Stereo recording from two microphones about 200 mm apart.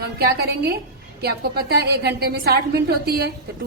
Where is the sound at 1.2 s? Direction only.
50° right (ahead or behind).